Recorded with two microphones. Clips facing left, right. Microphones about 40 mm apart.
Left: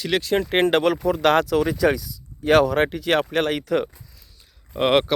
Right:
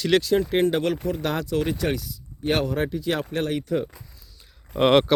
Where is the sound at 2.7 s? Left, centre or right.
Left.